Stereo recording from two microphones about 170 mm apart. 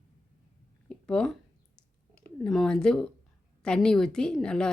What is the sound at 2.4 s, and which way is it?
A woman's voice, 5° left (ahead or behind).